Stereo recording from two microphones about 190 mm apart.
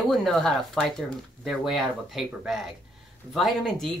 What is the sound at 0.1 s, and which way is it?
Speech, centre (ahead or behind).